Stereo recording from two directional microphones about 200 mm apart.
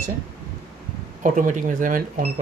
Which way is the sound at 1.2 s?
40° right (ahead or behind).